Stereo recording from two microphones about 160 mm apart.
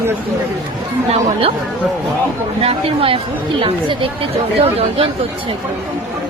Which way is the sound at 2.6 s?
35° right (ahead or behind).